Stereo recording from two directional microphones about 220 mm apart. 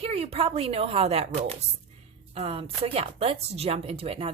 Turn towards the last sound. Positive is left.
turn(degrees=-25)  # may be behind; listen again after turning